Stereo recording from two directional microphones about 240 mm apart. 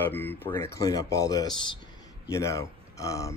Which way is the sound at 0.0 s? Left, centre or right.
Centre.